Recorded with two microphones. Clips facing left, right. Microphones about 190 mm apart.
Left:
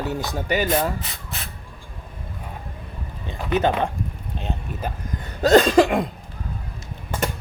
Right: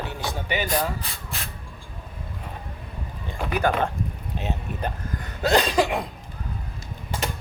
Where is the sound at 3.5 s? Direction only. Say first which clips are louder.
Left 3 dB; 20° left (ahead or behind).